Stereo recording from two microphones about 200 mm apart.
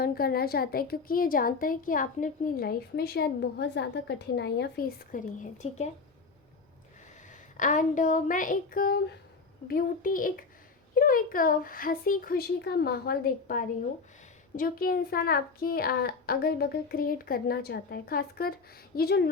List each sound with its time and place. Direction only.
0.0 s a woman's voice: 50° left (ahead or behind)
7.5 s a woman's voice: 40° left (ahead or behind)